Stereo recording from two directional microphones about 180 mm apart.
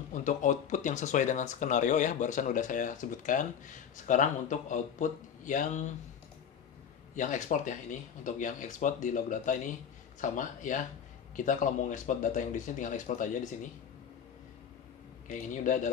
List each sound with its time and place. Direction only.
0.1 s speech: 45° left (ahead or behind)
7.2 s speech: 45° left (ahead or behind)
15.5 s speech: 45° left (ahead or behind)